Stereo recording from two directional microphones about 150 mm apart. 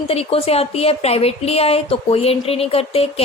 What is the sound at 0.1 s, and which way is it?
A woman's voice, 40° left (ahead or behind).